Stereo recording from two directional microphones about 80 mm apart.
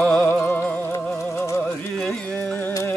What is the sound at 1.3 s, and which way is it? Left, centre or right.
Music, left.